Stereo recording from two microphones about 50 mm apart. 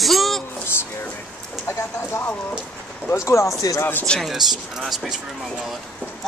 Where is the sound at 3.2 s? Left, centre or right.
Left.